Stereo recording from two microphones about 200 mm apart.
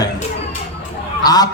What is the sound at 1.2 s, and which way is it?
Speech, 20° left (ahead or behind).